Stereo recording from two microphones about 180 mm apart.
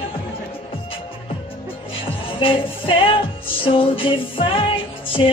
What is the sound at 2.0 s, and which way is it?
Music, 30° left (ahead or behind).